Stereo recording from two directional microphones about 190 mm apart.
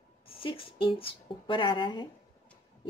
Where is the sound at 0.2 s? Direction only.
30° left (ahead or behind).